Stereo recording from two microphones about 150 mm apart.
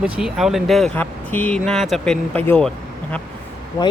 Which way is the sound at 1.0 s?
10° left (ahead or behind).